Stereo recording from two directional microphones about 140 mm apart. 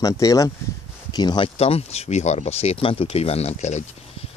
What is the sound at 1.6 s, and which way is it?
Speech, 50° left (ahead or behind).